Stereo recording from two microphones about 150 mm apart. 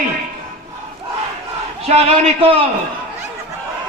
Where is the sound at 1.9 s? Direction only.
40° right (ahead or behind).